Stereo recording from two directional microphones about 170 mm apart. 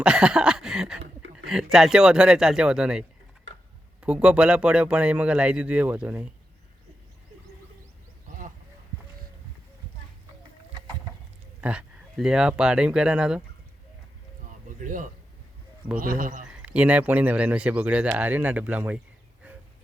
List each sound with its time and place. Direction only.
0.0 s speech: 5° right (ahead or behind)
11.6 s speech: 5° right (ahead or behind)
14.8 s speech: 50° right (ahead or behind)
16.5 s speech: 5° right (ahead or behind)
19.4 s a sound: 10° right (ahead or behind)